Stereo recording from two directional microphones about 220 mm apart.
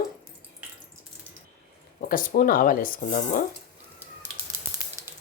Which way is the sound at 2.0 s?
40° left (ahead or behind).